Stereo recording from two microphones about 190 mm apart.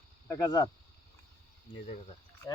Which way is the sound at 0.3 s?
15° left (ahead or behind).